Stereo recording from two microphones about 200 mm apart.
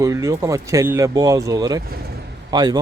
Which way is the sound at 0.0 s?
15° right (ahead or behind).